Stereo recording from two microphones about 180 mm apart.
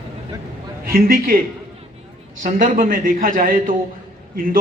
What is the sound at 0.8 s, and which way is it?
Speech, 55° right (ahead or behind).